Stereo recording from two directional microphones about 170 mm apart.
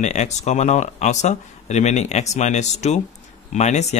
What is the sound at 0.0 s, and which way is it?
Speech, 45° left (ahead or behind).